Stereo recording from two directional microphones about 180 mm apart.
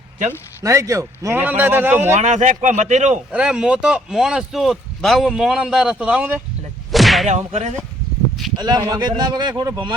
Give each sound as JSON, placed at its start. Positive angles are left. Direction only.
{"t": 0.3, "sound": "a man's voice", "side_deg": -15}
{"t": 2.1, "sound": "speech", "side_deg": -40}
{"t": 3.3, "sound": "speech", "side_deg": -5}
{"t": 6.9, "sound": "whip", "side_deg": 0}
{"t": 7.3, "sound": "speech", "side_deg": -40}
{"t": 8.5, "sound": "speech", "side_deg": -20}